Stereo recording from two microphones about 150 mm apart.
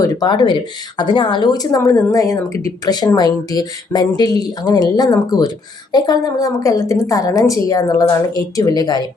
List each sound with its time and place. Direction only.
0.0 s speech: 25° left (ahead or behind)